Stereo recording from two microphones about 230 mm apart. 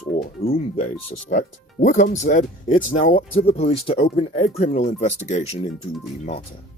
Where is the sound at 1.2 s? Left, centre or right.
Left.